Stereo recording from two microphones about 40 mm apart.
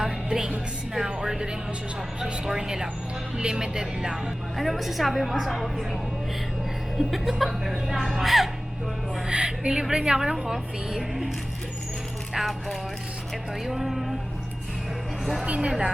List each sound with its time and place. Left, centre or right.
0.0 s music: centre
0.9 s speech: centre
4.5 s speech: centre
7.1 s speech: centre
9.2 s speech: right
12.3 s speech: centre
15.4 s a woman's voice: right